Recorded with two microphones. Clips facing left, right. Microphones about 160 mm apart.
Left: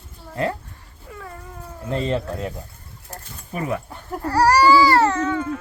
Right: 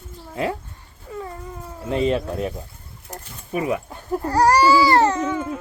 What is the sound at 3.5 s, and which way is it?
Speech, 15° right (ahead or behind).